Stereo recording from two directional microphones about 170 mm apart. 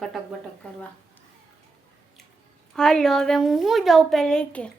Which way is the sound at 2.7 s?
5° left (ahead or behind).